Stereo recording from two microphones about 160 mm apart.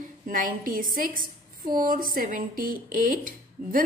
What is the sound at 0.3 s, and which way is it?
A woman's voice, 55° right (ahead or behind).